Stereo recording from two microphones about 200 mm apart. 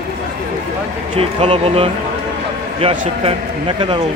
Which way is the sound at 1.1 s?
25° right (ahead or behind).